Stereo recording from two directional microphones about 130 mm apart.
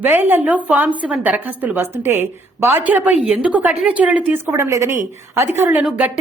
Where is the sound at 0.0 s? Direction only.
15° right (ahead or behind).